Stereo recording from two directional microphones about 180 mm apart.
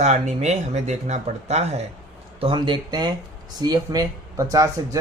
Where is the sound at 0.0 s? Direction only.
40° right (ahead or behind).